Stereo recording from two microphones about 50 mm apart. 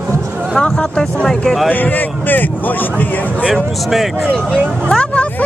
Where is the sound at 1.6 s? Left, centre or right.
Left.